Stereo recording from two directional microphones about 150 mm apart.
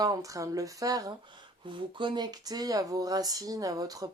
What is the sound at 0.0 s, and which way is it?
Speech, 25° right (ahead or behind).